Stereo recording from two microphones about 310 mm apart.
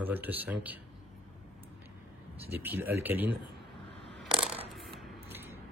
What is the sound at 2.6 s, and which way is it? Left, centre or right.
Speech, centre.